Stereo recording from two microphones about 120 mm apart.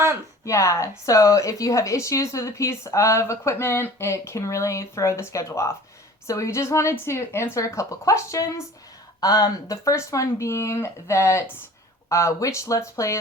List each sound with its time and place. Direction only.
0.4 s a woman's voice: 25° left (ahead or behind)